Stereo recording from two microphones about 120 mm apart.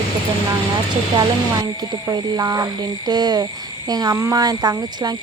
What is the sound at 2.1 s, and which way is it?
Speech, 30° right (ahead or behind).